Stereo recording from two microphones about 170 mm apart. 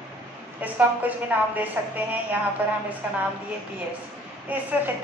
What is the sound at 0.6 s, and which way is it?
A woman's voice, 10° right (ahead or behind).